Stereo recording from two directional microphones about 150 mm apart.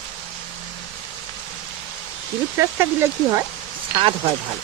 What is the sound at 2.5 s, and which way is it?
Speech, 15° right (ahead or behind).